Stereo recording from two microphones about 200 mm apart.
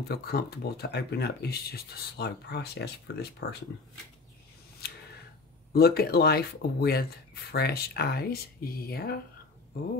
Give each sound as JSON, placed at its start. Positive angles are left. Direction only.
{"t": 0.1, "sound": "speech", "side_deg": 50}
{"t": 5.7, "sound": "speech", "side_deg": 50}